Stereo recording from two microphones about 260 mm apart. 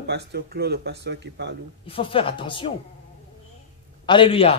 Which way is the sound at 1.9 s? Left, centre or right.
Centre.